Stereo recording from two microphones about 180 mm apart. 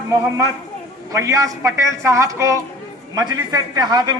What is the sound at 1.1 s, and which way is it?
A man's voice, 20° right (ahead or behind).